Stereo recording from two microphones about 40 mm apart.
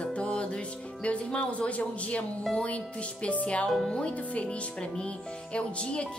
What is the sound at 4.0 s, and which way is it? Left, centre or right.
A woman's voice, left.